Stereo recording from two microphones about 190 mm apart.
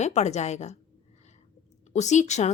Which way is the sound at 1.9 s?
40° left (ahead or behind).